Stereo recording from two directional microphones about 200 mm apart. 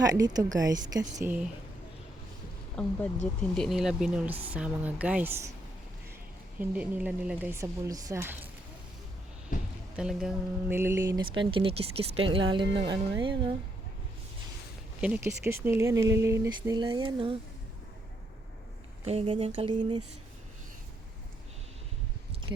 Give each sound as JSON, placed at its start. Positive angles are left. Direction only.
{"t": 0.0, "sound": "speech", "side_deg": -20}
{"t": 2.8, "sound": "speech", "side_deg": 5}
{"t": 6.6, "sound": "speech", "side_deg": -10}
{"t": 9.9, "sound": "speech", "side_deg": -5}
{"t": 15.0, "sound": "speech", "side_deg": -10}
{"t": 19.0, "sound": "speech", "side_deg": -30}